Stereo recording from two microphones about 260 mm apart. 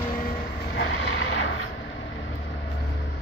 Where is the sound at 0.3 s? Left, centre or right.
Left.